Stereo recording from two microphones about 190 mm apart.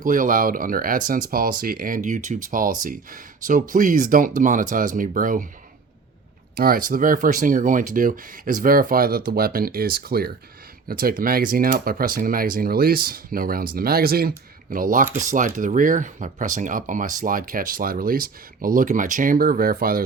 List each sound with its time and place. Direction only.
0.0 s speech: 45° right (ahead or behind)
6.6 s speech: 50° right (ahead or behind)